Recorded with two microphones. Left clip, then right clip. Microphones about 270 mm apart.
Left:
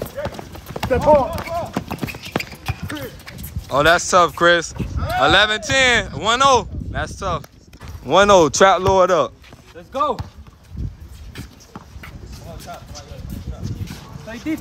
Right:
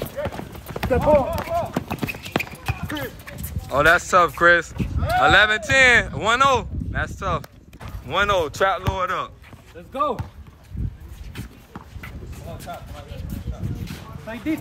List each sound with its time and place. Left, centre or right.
0.2 s clip-clop: left
0.7 s clip-clop: centre
3.7 s speech: centre; by 8.7 s left
8.9 s speech: centre
11.3 s a sound: centre
12.7 s speech: centre
13.8 s dog: centre